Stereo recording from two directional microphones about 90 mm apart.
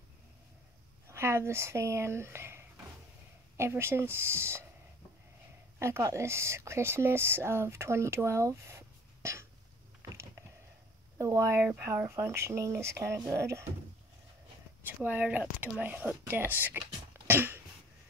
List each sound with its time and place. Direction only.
1.0 s speech: 30° right (ahead or behind)
5.8 s speech: 30° right (ahead or behind)
11.1 s speech: 35° right (ahead or behind)
14.9 s speech: 20° right (ahead or behind)